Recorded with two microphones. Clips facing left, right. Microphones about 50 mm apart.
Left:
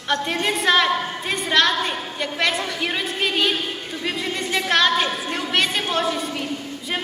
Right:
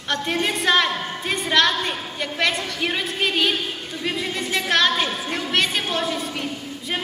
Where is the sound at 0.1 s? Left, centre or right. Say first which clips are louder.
Left 1 dB; centre.